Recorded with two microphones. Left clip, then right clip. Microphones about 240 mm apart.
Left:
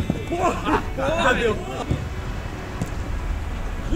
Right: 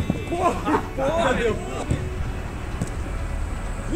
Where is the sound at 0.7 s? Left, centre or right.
Left.